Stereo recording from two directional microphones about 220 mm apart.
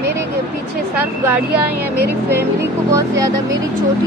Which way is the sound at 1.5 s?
45° right (ahead or behind).